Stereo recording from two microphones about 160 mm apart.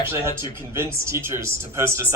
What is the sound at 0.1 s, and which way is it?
A man's voice, 15° right (ahead or behind).